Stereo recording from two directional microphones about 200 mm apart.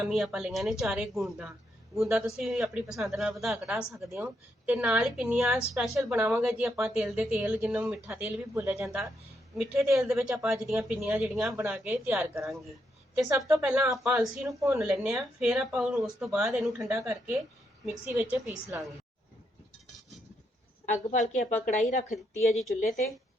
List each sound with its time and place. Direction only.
0.0 s speech: centre (ahead or behind)
9.8 s speech: 15° right (ahead or behind)
10.1 s speech: 5° right (ahead or behind)
12.1 s speech: 15° right (ahead or behind)
13.9 s speech: centre (ahead or behind)
14.4 s speech: 15° right (ahead or behind)
14.8 s speech: centre (ahead or behind)
16.9 s speech: 15° right (ahead or behind)
20.8 s a woman's voice: 35° left (ahead or behind)